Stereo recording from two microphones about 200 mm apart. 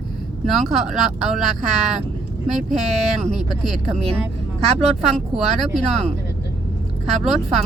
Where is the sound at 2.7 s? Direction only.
35° right (ahead or behind).